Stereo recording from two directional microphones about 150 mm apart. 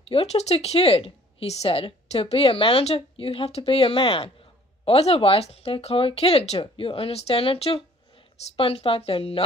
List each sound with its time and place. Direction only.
0.1 s a woman's voice: 40° left (ahead or behind)